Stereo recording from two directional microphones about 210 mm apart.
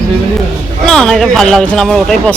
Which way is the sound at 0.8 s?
Centre (ahead or behind).